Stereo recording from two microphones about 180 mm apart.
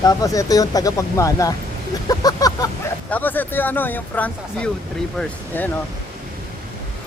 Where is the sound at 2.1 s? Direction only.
20° left (ahead or behind).